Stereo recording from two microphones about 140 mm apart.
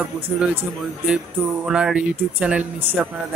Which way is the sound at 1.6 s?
5° right (ahead or behind).